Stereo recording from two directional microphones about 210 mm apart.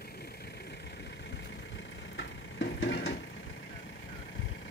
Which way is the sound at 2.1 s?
55° left (ahead or behind).